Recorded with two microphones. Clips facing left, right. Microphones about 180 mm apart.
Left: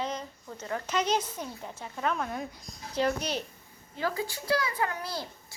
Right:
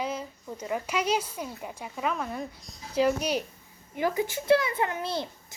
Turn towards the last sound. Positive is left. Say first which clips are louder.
# right 3 dB
turn(degrees=-25)  # may be behind; listen again after turning